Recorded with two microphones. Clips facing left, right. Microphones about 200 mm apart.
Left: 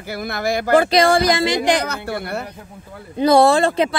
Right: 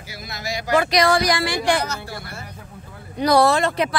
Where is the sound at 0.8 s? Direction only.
25° left (ahead or behind).